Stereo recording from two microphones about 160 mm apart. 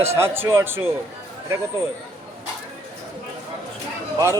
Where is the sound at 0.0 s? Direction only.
15° right (ahead or behind).